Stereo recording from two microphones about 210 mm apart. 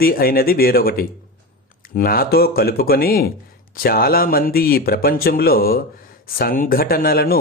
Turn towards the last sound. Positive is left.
turn(degrees=45)  # may be behind; listen again after turning